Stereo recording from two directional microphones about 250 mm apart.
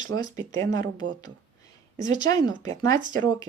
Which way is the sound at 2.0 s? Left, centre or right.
Centre.